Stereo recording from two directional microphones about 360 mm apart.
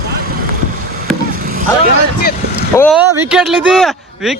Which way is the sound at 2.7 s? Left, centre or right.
Centre.